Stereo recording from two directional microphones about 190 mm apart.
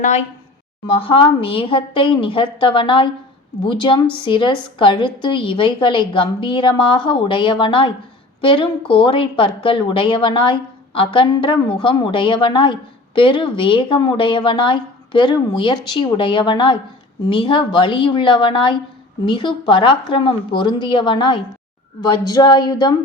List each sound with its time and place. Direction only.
0.9 s speech: 30° left (ahead or behind)